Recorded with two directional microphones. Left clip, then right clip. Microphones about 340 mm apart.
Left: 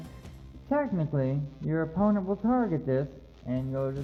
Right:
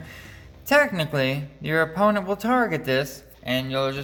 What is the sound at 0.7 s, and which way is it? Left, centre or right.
Speech, centre.